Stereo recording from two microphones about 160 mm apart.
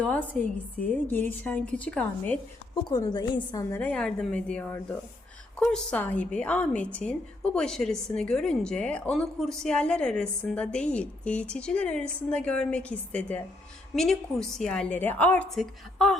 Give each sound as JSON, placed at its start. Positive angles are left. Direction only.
{"t": 0.0, "sound": "a woman's voice", "side_deg": 10}
{"t": 2.9, "sound": "a woman's voice", "side_deg": 25}
{"t": 3.8, "sound": "a woman's voice", "side_deg": 5}